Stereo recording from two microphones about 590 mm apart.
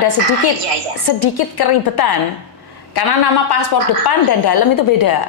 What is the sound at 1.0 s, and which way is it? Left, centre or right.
A woman's voice, left.